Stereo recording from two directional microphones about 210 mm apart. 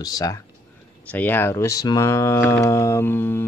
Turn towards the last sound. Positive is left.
turn(degrees=10)  # may be behind; listen again after turning